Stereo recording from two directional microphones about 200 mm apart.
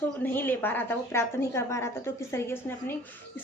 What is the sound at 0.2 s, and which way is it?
A woman's voice, 10° left (ahead or behind).